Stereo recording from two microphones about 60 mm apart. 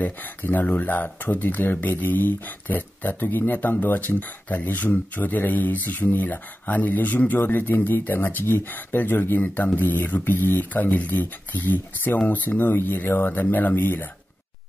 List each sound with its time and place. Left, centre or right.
0.0 s speech: left